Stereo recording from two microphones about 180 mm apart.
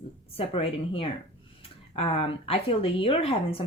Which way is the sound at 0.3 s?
30° left (ahead or behind).